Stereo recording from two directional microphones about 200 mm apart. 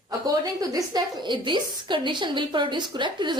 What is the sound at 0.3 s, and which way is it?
A woman's voice, 20° right (ahead or behind).